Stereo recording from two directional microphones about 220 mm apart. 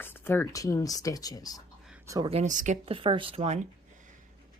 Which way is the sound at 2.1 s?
15° right (ahead or behind).